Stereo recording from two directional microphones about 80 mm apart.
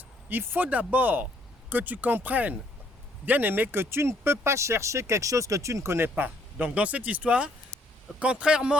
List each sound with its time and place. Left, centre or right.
0.3 s speech: right